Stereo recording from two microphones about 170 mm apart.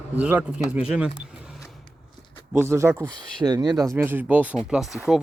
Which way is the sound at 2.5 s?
15° right (ahead or behind).